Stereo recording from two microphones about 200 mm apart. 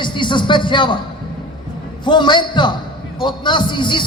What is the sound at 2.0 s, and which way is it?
A man's voice, 25° left (ahead or behind).